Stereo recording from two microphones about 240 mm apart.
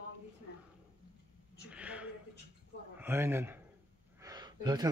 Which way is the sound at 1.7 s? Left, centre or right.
Centre.